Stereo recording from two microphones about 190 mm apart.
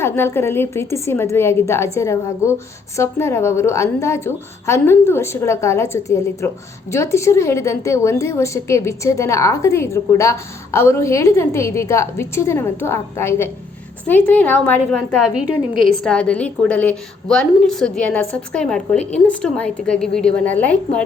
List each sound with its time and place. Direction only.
0.0 s a woman's voice: 15° left (ahead or behind)